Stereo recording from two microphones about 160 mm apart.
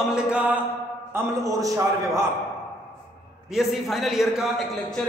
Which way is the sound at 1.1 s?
20° right (ahead or behind).